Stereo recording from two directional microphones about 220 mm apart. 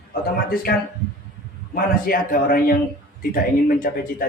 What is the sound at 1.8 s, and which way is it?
Speech, 40° left (ahead or behind).